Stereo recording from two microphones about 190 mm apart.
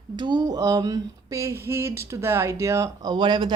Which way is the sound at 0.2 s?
20° right (ahead or behind).